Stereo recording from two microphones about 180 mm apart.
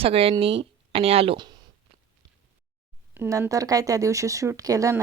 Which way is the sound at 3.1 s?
15° right (ahead or behind).